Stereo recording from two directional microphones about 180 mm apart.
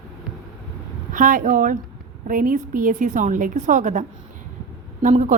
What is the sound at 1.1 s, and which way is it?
A woman's voice, 50° right (ahead or behind).